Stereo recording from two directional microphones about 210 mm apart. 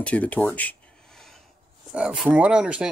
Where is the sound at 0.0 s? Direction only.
5° left (ahead or behind).